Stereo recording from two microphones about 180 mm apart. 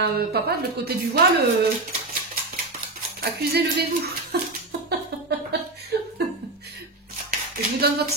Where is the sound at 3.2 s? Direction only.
60° right (ahead or behind).